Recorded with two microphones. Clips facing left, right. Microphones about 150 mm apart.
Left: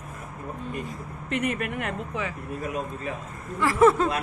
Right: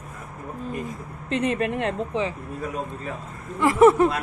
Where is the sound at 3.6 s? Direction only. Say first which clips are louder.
Right 4 dB; 20° right (ahead or behind).